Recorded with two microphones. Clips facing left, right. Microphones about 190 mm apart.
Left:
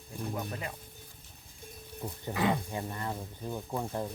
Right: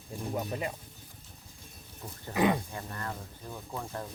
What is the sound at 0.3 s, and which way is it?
Speech, 20° right (ahead or behind).